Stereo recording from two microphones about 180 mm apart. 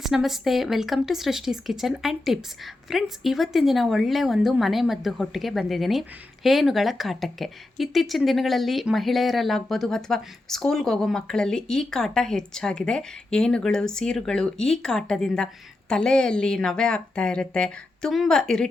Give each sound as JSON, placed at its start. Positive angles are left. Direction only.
{"t": 0.0, "sound": "speech", "side_deg": 0}